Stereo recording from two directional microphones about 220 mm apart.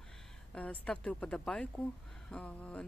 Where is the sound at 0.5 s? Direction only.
5° left (ahead or behind).